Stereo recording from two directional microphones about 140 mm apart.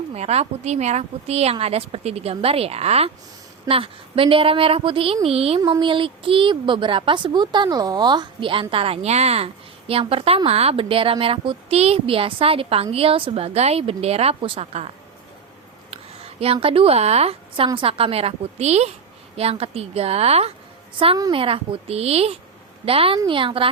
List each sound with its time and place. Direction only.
0.1 s a woman's voice: 50° right (ahead or behind)
5.5 s a woman's voice: 35° right (ahead or behind)
16.4 s a woman's voice: 45° right (ahead or behind)